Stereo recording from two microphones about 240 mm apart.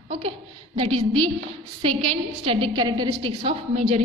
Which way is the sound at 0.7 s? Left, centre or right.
Right.